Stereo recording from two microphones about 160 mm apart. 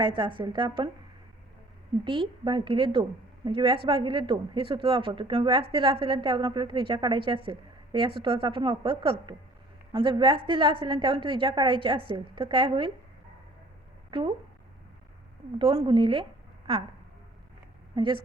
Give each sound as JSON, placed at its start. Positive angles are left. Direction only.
{"t": 0.2, "sound": "a woman's voice", "side_deg": -30}
{"t": 2.4, "sound": "a woman's voice", "side_deg": -30}
{"t": 14.1, "sound": "speech", "side_deg": -30}
{"t": 15.5, "sound": "a woman's voice", "side_deg": -35}
{"t": 17.9, "sound": "a woman's voice", "side_deg": -30}